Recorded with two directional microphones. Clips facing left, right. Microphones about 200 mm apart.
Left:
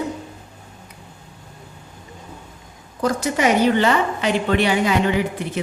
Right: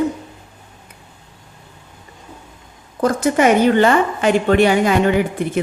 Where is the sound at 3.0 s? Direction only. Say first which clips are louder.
Right 5 dB; 50° right (ahead or behind).